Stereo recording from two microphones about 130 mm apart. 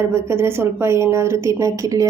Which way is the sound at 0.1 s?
20° right (ahead or behind).